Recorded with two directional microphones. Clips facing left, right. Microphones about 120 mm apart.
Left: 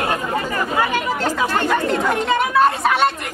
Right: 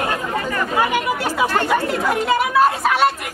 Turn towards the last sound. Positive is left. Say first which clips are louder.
# even
turn(degrees=0)  # may be behind; listen again after turning